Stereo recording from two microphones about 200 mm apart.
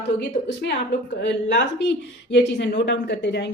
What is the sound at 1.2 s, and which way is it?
Speech, 60° left (ahead or behind).